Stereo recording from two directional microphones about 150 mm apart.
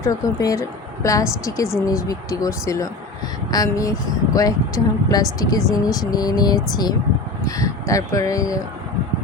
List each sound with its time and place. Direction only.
0.0 s speech: 20° left (ahead or behind)